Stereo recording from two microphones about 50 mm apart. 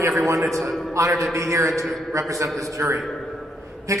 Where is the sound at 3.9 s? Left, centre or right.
Right.